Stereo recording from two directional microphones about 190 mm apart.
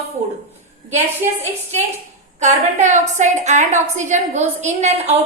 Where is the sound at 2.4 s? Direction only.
40° right (ahead or behind).